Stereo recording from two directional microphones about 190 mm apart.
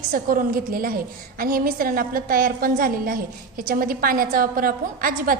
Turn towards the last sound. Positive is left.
turn(degrees=-50)  # may be behind; listen again after turning